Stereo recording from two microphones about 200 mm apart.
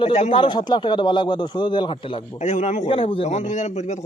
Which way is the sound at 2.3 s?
35° left (ahead or behind).